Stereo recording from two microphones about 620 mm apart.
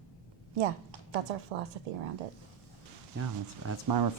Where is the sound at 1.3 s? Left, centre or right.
Right.